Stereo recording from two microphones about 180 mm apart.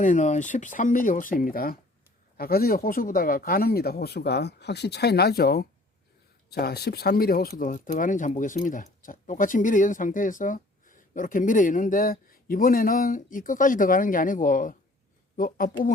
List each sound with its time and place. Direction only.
0.0 s speech: 45° left (ahead or behind)